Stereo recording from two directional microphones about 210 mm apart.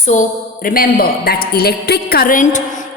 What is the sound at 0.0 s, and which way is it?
A woman's voice, 35° left (ahead or behind).